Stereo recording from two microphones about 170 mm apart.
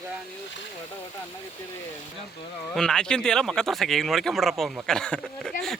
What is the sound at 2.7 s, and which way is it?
Speech, 5° left (ahead or behind).